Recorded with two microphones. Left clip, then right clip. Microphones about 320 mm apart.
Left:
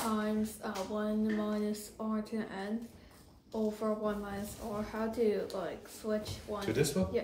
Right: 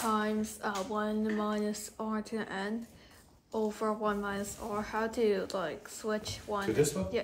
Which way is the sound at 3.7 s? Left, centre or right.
Right.